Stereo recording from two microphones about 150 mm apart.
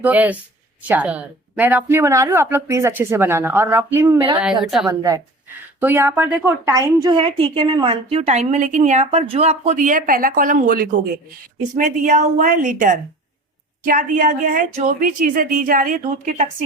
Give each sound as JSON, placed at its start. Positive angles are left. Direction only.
{"t": 0.0, "sound": "speech", "side_deg": -10}
{"t": 4.4, "sound": "a woman's voice", "side_deg": -5}
{"t": 4.9, "sound": "speech", "side_deg": -20}
{"t": 7.2, "sound": "a woman's voice", "side_deg": -35}
{"t": 9.0, "sound": "a woman's voice", "side_deg": -40}
{"t": 11.7, "sound": "a woman's voice", "side_deg": -55}